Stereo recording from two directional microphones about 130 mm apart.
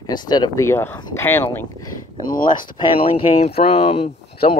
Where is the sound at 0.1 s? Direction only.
35° left (ahead or behind); by 1.7 s 20° left (ahead or behind).